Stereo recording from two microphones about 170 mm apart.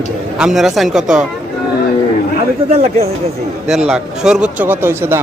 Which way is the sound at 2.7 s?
40° right (ahead or behind).